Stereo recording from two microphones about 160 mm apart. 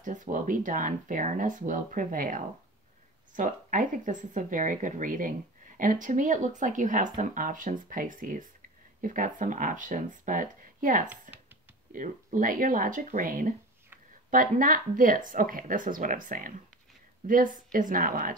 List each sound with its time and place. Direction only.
0.0 s speech: 55° right (ahead or behind)
11.3 s a sound: 55° right (ahead or behind)
11.9 s speech: 55° right (ahead or behind)